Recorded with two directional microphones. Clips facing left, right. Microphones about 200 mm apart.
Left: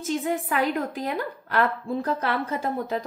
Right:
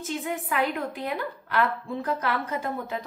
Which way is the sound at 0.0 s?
40° left (ahead or behind).